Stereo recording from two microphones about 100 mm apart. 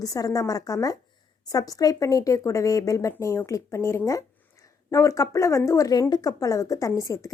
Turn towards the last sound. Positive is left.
turn(degrees=30)  # may be behind; listen again after turning